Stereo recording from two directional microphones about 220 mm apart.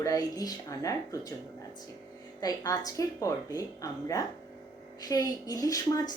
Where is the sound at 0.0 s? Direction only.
15° left (ahead or behind).